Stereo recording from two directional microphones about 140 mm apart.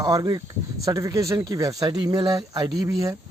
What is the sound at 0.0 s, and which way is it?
Speech, 30° right (ahead or behind).